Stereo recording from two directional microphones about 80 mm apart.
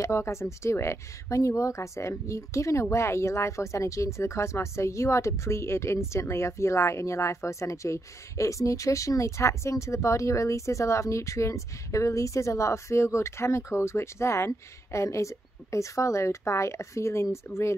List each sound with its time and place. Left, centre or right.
0.0 s speech: left